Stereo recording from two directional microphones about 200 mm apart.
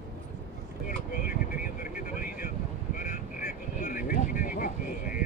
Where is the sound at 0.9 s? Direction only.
45° left (ahead or behind).